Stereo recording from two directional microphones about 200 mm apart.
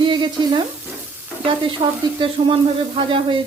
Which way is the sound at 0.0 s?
25° right (ahead or behind).